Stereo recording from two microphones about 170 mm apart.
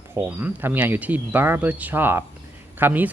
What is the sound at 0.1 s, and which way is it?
Speech, 10° right (ahead or behind).